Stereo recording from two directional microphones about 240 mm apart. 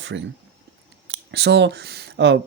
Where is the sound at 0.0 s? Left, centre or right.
Right.